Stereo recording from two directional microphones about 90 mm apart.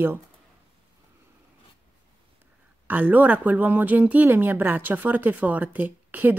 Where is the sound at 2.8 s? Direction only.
20° right (ahead or behind).